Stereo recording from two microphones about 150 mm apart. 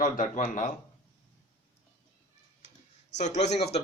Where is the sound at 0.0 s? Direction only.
60° left (ahead or behind).